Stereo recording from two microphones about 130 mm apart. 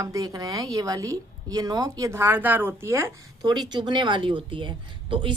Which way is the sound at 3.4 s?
35° right (ahead or behind).